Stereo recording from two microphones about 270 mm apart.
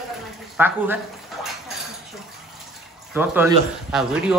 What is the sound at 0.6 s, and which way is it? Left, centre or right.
Speech, centre.